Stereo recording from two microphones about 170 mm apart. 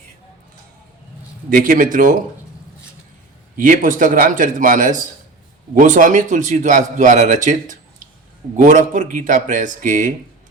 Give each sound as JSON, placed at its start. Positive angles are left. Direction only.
{"t": 1.5, "sound": "a man's voice", "side_deg": -55}
{"t": 3.6, "sound": "a man's voice", "side_deg": -50}